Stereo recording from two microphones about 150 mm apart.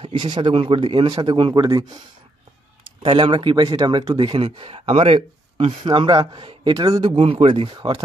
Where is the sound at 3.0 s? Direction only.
30° right (ahead or behind).